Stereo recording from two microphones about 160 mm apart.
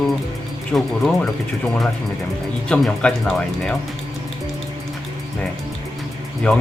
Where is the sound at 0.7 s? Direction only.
Centre (ahead or behind).